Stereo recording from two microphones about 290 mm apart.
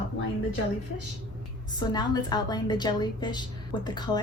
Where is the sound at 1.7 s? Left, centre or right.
Centre.